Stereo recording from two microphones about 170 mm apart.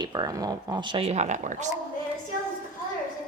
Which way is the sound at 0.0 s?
25° right (ahead or behind).